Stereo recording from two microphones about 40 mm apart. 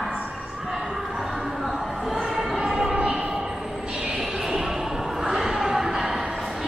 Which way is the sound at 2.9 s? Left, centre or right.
Right.